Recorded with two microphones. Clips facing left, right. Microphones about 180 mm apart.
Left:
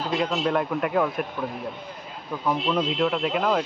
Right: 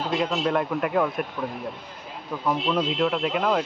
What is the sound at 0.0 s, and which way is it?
Speech, centre (ahead or behind).